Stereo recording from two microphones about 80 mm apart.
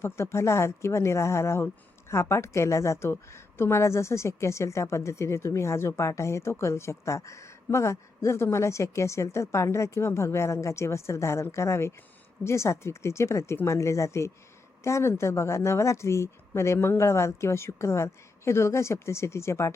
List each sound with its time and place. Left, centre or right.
0.0 s speech: left